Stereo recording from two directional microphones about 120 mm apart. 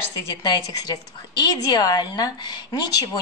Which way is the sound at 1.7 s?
35° left (ahead or behind).